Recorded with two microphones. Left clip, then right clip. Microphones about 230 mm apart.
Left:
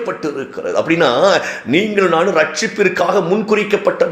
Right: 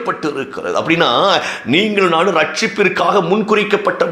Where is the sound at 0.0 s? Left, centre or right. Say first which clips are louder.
Right 2 dB; right.